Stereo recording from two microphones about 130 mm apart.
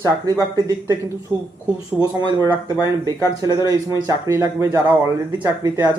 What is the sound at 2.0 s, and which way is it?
Speech, 30° right (ahead or behind).